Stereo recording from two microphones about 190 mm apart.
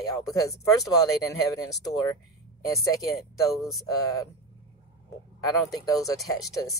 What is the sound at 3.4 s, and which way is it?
Speech, 20° left (ahead or behind).